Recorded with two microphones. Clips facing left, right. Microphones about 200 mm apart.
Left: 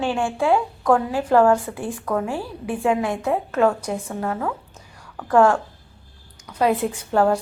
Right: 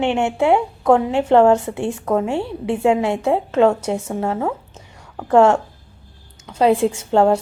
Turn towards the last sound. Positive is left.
turn(degrees=-25)  # may be behind; listen again after turning